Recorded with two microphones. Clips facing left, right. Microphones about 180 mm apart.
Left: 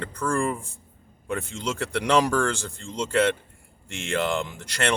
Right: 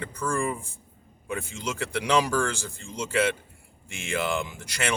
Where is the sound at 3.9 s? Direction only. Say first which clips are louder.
Left 2 dB; 10° right (ahead or behind).